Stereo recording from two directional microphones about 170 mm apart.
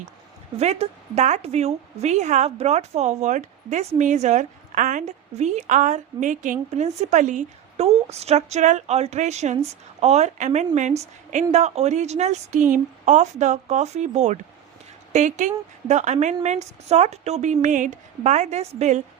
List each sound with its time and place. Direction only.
0.5 s a woman's voice: 40° right (ahead or behind)